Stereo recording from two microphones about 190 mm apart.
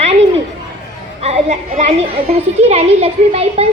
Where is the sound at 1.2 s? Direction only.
35° right (ahead or behind).